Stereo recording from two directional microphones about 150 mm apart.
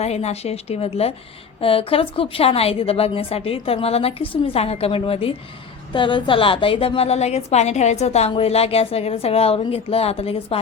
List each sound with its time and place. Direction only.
0.0 s a woman's voice: 45° left (ahead or behind)